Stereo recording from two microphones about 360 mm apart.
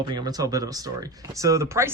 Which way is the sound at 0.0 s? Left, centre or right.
Centre.